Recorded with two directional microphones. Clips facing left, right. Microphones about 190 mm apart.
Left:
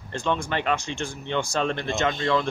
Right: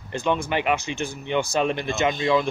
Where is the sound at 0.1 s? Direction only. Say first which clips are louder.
Right 3 dB; 5° right (ahead or behind).